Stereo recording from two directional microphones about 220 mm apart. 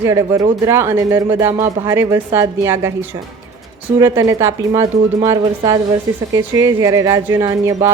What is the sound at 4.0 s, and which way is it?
A woman's voice, 15° right (ahead or behind).